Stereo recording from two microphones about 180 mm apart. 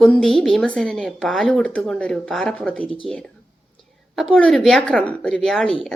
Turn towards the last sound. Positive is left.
turn(degrees=5)  # may be behind; listen again after turning